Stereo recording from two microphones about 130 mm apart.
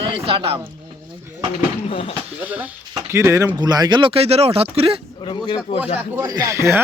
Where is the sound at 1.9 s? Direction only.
50° left (ahead or behind).